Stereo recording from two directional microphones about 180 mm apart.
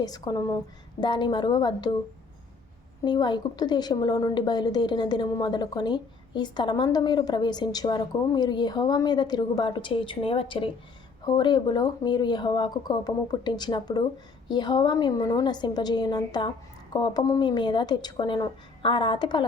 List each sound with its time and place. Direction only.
0.0 s a woman's voice: 20° left (ahead or behind)
3.0 s a woman's voice: 25° left (ahead or behind)